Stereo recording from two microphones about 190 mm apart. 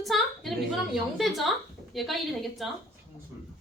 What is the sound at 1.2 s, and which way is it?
A woman's voice, centre (ahead or behind).